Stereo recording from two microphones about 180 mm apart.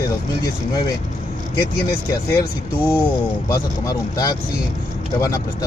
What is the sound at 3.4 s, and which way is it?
Speech, 20° left (ahead or behind).